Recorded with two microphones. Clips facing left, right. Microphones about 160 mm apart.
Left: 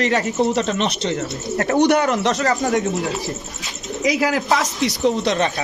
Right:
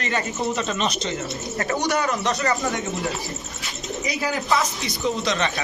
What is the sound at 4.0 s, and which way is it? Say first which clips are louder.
Speech: left 8 dB; 90° left.